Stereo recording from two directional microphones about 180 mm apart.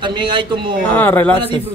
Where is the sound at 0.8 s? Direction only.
10° left (ahead or behind).